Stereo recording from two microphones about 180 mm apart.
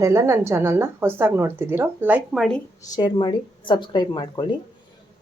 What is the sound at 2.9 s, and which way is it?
Speech, 25° left (ahead or behind).